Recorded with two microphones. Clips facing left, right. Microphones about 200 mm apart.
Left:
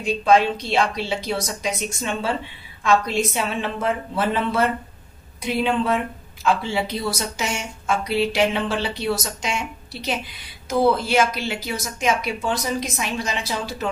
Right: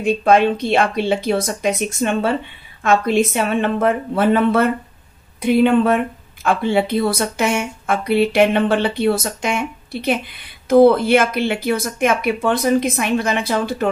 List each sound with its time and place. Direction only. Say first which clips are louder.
0.0 s speech: right 4 dB; 55° right (ahead or behind)